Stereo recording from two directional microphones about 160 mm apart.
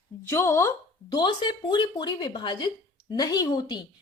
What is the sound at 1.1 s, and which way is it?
A woman's voice, 30° left (ahead or behind).